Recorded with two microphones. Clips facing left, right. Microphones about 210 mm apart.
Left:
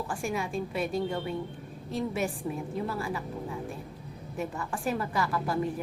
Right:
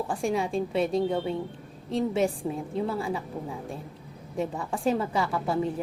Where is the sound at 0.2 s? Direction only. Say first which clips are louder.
Right 6 dB; 30° right (ahead or behind).